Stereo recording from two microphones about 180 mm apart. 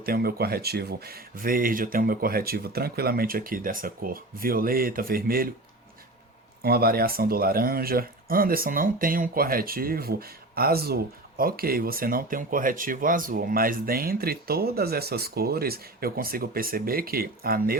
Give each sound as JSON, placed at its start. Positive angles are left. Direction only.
{"t": 0.0, "sound": "speech", "side_deg": -55}
{"t": 6.6, "sound": "speech", "side_deg": -60}